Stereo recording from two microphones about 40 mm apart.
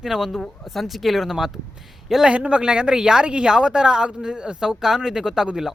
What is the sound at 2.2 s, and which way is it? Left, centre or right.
A woman's voice, right.